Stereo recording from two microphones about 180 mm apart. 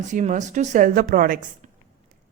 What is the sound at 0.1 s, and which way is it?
Speech, 40° right (ahead or behind).